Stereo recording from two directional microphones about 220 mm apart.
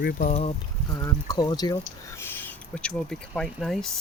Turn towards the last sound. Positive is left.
turn(degrees=0)  # may be behind; listen again after turning